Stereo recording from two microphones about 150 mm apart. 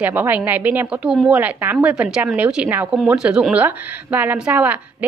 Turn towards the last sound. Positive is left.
turn(degrees=-10)  # may be behind; listen again after turning